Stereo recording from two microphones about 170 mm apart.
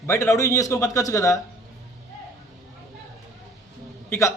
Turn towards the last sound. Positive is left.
turn(degrees=15)  # may be behind; listen again after turning